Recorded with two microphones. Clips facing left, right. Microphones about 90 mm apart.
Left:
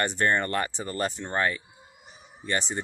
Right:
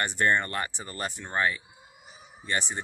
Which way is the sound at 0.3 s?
40° left (ahead or behind).